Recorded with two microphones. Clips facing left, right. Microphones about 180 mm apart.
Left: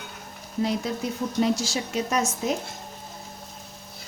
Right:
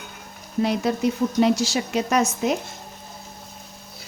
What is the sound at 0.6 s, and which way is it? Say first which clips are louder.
A woman's voice: right 5 dB; 70° right (ahead or behind).